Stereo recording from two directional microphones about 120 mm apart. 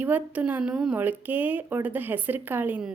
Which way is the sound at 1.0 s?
15° right (ahead or behind).